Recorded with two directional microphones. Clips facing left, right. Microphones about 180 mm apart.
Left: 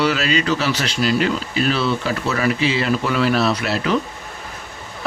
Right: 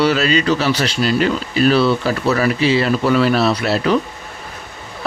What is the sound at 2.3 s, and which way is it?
Speech, 35° right (ahead or behind).